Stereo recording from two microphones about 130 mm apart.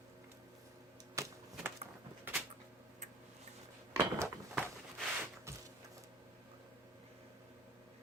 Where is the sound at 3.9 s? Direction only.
20° right (ahead or behind).